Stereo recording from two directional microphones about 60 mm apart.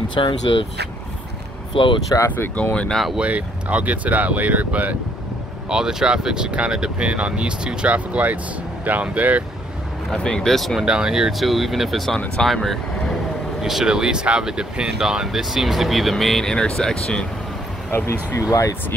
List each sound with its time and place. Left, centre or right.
2.1 s speech: left
2.5 s speech: left
3.2 s speech: right
5.7 s speech: centre
10.1 s speech: centre
10.5 s speech: centre
10.8 s speech: centre
13.6 s speech: centre
17.9 s speech: left